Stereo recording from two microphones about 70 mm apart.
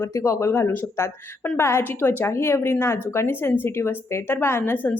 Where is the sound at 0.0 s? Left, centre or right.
Left.